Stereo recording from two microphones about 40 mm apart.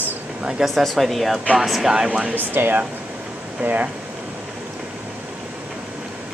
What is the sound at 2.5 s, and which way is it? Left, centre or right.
Speech, right.